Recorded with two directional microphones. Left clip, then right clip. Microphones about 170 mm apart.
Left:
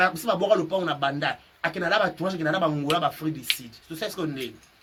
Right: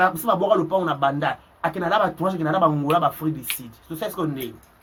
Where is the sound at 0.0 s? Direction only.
10° left (ahead or behind).